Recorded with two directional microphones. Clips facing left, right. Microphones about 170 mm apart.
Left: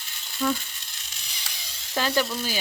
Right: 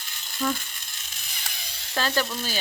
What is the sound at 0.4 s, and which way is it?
Speech, centre (ahead or behind).